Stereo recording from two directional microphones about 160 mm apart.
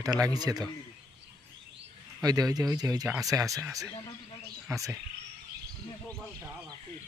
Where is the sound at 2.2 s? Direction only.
25° right (ahead or behind).